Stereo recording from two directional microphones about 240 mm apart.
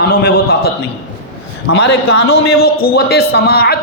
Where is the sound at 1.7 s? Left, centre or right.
Left.